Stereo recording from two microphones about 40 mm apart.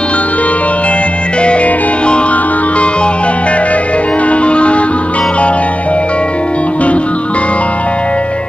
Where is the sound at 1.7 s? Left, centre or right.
Left.